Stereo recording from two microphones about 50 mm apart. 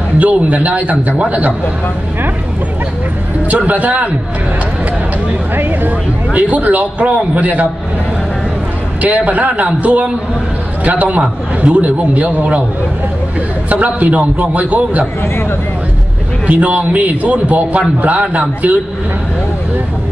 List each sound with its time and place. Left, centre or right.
0.2 s a man's voice: right
3.4 s speech: right
5.6 s speech: right
6.3 s a man's voice: right
9.0 s a man's voice: right
10.8 s a man's voice: right
13.7 s a man's voice: right
16.4 s a man's voice: right